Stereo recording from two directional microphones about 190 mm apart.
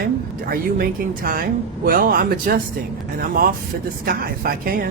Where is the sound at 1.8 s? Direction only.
50° right (ahead or behind).